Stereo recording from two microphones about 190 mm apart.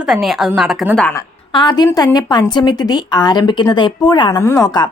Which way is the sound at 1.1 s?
20° left (ahead or behind).